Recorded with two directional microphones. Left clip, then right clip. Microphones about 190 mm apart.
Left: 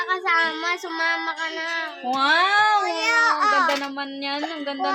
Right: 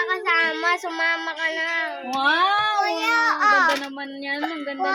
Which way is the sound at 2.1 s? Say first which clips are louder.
Left 1 dB; 50° left (ahead or behind).